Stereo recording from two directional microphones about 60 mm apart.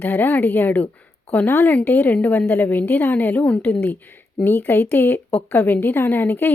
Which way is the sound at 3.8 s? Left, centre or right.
Left.